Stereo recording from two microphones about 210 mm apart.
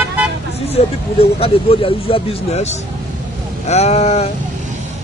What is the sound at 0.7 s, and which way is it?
Speech, 25° left (ahead or behind).